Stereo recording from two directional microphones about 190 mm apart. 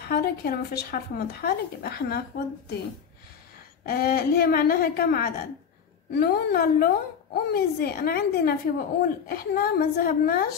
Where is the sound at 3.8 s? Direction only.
55° left (ahead or behind).